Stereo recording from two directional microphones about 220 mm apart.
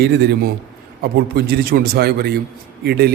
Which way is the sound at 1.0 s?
40° right (ahead or behind).